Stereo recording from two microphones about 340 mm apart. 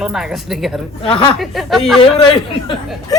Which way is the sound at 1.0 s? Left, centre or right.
Centre.